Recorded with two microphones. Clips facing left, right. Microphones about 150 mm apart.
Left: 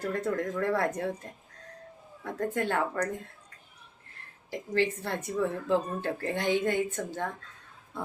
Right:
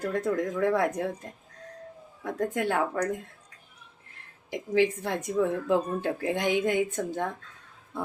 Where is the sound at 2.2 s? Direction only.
15° right (ahead or behind).